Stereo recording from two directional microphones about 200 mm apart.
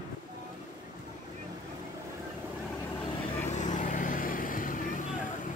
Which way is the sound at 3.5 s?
40° left (ahead or behind).